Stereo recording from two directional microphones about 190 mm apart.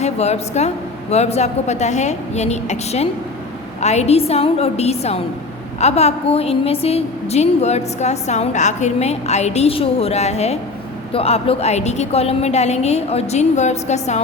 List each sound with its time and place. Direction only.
0.0 s a woman's voice: 35° left (ahead or behind)